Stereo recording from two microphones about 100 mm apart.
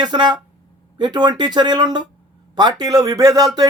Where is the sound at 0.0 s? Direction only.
45° right (ahead or behind).